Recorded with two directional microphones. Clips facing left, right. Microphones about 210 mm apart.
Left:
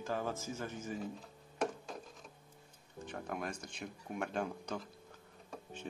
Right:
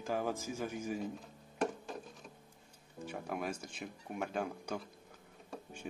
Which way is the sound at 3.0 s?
5° right (ahead or behind).